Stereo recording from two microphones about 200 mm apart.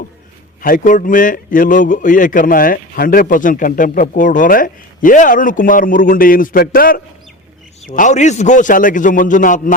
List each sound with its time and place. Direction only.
0.6 s a man's voice: 45° left (ahead or behind)